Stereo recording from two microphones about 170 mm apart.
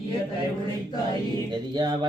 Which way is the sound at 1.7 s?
25° right (ahead or behind).